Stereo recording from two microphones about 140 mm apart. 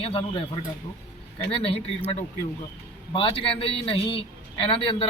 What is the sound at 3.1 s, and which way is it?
A man's voice, 40° left (ahead or behind).